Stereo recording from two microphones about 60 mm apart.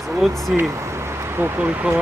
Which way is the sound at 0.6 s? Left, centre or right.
Right.